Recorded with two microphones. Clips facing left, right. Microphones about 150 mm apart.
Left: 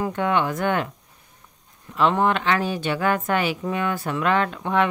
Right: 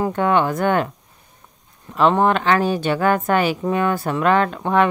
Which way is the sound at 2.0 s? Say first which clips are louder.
Right 4 dB; 40° right (ahead or behind).